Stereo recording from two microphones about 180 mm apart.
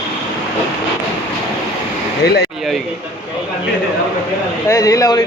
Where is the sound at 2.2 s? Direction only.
65° left (ahead or behind).